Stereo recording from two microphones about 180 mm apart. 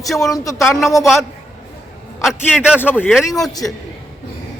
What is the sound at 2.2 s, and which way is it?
Speech, 5° right (ahead or behind).